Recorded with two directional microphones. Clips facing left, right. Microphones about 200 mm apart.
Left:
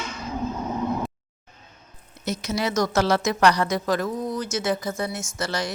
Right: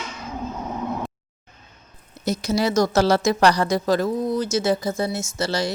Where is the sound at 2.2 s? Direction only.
35° right (ahead or behind).